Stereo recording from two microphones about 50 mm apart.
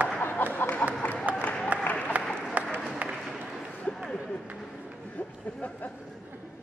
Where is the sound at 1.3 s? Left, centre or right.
Right.